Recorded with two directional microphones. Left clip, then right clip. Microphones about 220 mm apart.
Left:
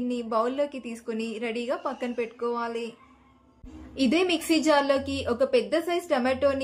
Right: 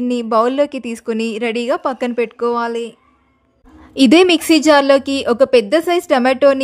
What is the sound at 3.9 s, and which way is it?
A woman's voice, 50° right (ahead or behind).